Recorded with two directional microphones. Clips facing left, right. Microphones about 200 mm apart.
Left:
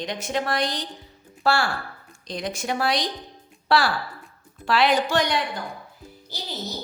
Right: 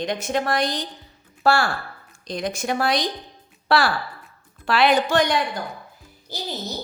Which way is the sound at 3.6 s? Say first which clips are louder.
Right 1 dB; 60° right (ahead or behind).